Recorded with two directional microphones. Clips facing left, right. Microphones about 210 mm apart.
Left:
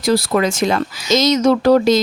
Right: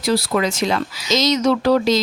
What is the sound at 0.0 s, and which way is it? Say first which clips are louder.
Speech: left 3 dB; 45° left (ahead or behind).